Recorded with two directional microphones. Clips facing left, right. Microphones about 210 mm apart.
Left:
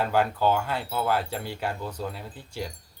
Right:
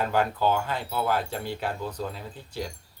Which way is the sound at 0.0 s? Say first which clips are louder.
Left 1 dB; 10° left (ahead or behind).